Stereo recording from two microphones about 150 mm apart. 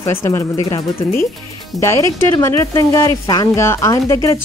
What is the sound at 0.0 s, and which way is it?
Speech, 20° left (ahead or behind).